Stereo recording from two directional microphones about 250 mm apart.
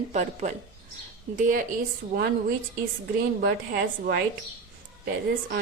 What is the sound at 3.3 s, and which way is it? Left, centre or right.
Speech, right.